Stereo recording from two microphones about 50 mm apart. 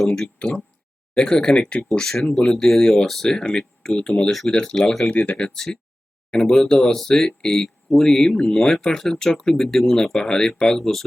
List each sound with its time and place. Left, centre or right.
1.1 s speech: centre
1.9 s speech: centre